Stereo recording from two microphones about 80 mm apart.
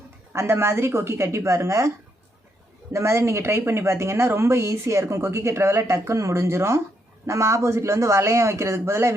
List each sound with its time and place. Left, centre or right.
0.3 s speech: right
2.9 s speech: right